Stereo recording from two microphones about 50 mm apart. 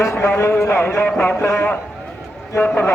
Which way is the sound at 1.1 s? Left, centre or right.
Left.